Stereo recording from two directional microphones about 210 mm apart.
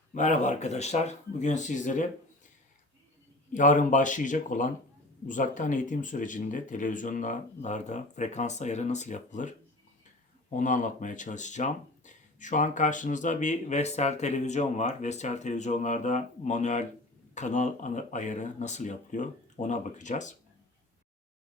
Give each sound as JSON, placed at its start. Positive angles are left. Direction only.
{"t": 0.1, "sound": "speech", "side_deg": 35}
{"t": 3.5, "sound": "speech", "side_deg": 35}